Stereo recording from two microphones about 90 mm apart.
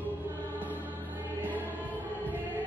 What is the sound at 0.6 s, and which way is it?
Music, 20° right (ahead or behind).